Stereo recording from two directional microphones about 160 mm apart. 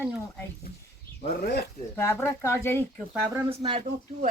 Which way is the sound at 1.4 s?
90° left.